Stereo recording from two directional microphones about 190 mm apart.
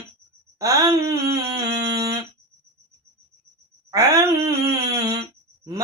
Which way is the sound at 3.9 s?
20° right (ahead or behind).